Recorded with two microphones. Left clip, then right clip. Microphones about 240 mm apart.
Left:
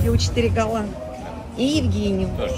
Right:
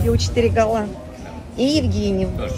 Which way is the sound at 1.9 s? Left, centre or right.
Right.